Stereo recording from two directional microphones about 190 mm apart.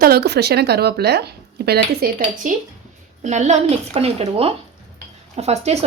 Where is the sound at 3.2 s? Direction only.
35° right (ahead or behind).